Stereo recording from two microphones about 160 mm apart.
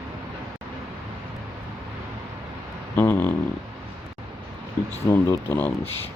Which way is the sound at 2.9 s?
10° left (ahead or behind).